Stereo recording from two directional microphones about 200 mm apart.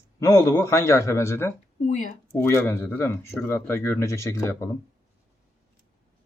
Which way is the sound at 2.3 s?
10° left (ahead or behind).